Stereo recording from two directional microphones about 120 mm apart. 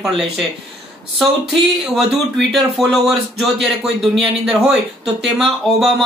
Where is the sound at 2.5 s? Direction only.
Centre (ahead or behind).